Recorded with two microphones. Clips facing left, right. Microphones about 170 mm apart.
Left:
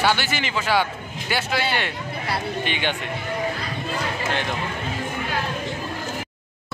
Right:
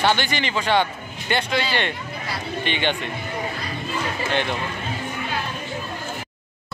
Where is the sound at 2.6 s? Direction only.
10° left (ahead or behind).